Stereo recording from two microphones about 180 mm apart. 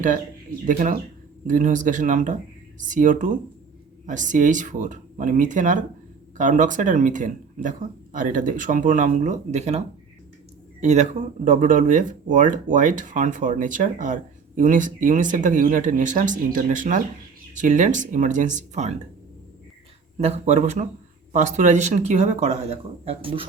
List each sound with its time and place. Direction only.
0.6 s speech: 45° right (ahead or behind)
20.1 s speech: 40° right (ahead or behind)